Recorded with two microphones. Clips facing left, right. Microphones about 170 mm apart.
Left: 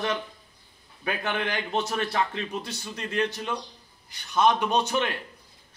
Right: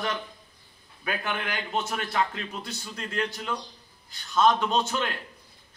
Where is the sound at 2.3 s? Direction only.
20° left (ahead or behind).